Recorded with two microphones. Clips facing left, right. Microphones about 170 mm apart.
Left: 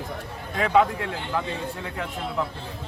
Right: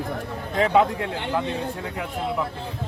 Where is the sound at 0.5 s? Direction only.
20° right (ahead or behind).